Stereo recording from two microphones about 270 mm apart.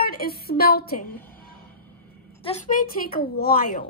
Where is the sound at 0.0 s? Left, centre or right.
Left.